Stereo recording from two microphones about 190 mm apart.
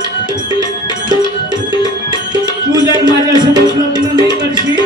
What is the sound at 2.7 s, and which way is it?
Music, 20° right (ahead or behind).